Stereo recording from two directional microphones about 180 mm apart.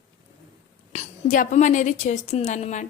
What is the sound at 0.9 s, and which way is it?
A woman's voice, 40° left (ahead or behind).